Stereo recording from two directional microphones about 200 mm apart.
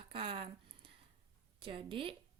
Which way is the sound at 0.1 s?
25° right (ahead or behind).